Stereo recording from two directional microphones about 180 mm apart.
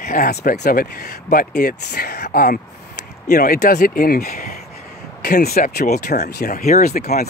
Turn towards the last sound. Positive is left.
turn(degrees=60)  # may be behind; listen again after turning